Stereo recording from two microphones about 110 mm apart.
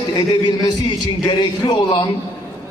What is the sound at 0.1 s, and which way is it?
A man's voice, 40° left (ahead or behind).